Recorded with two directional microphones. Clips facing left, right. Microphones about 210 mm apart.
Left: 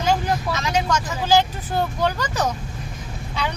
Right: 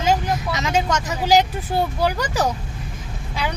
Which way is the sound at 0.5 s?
20° right (ahead or behind).